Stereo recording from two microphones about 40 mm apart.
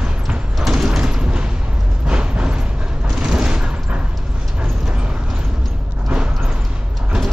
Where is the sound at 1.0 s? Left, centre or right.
Right.